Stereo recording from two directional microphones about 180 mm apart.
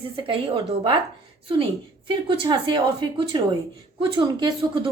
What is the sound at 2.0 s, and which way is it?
Speech, 30° right (ahead or behind).